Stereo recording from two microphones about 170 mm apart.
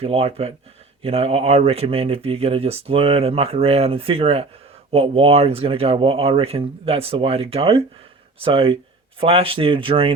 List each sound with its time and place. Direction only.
0.0 s speech: 35° right (ahead or behind)